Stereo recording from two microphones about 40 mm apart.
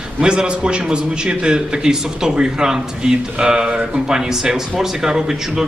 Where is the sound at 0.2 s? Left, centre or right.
Right.